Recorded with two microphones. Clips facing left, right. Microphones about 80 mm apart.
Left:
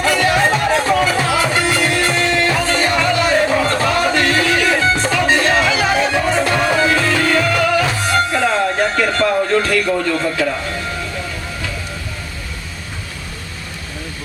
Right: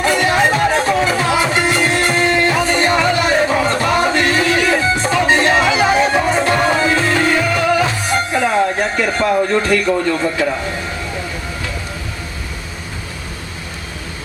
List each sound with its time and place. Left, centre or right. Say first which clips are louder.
0.0 s music: right 1 dB; right